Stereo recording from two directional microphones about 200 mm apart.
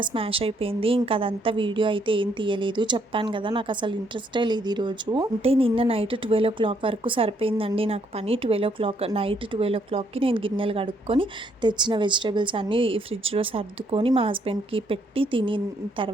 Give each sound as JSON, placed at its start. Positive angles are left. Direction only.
{"t": 0.0, "sound": "a woman's voice", "side_deg": -25}